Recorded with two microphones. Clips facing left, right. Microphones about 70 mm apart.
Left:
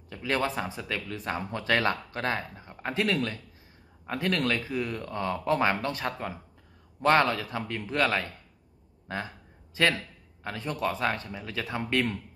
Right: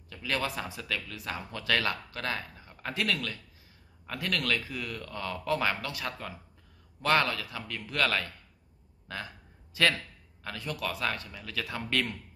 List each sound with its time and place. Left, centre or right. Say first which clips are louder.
0.1 s speech: left 4 dB; left